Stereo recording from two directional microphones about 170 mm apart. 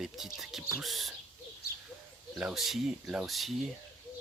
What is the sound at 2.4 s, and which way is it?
Speech, 5° right (ahead or behind).